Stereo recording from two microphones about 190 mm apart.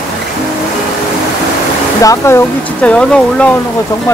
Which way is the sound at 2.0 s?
15° left (ahead or behind).